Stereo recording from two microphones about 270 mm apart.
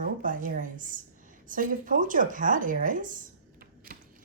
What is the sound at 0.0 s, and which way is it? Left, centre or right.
A woman's voice, right.